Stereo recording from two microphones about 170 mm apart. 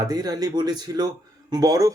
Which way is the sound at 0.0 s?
20° right (ahead or behind).